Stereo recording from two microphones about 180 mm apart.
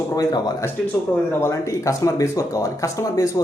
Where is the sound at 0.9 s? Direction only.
10° left (ahead or behind).